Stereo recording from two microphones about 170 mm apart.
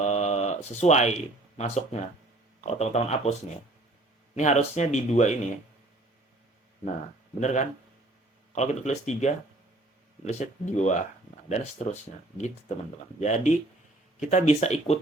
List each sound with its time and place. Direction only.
0.0 s a sound: 40° left (ahead or behind)
1.5 s speech: 40° left (ahead or behind)
4.4 s speech: 45° left (ahead or behind)
7.3 s speech: 45° left (ahead or behind)
13.1 s speech: 45° left (ahead or behind)